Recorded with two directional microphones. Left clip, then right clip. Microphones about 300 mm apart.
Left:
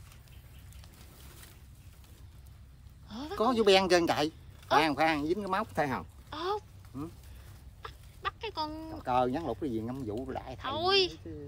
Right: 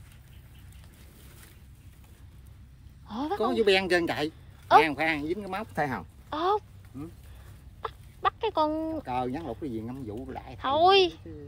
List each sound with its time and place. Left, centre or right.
3.1 s a sound: centre
3.3 s speech: centre
5.8 s a sound: centre
7.8 s chicken: centre
9.0 s speech: centre
10.6 s speech: centre